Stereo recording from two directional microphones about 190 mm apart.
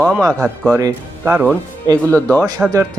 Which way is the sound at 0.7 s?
15° right (ahead or behind).